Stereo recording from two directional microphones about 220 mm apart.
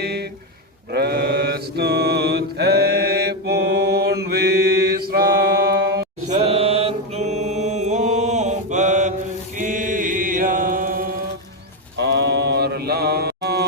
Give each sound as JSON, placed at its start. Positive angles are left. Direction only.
{"t": 0.0, "sound": "a sound", "side_deg": -45}
{"t": 0.9, "sound": "mantra", "side_deg": -45}
{"t": 6.2, "sound": "mantra", "side_deg": -30}